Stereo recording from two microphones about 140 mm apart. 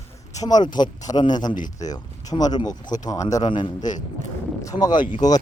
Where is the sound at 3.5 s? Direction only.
35° left (ahead or behind).